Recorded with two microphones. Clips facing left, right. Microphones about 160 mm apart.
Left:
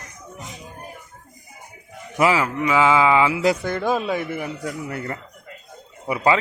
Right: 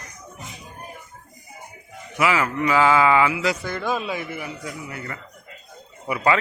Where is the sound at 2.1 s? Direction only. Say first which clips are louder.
Left 3 dB; 35° left (ahead or behind).